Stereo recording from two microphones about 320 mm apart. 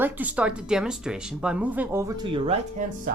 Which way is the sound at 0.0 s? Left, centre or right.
Centre.